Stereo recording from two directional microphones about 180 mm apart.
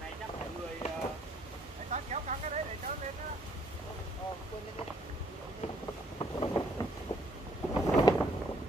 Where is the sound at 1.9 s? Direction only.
40° right (ahead or behind).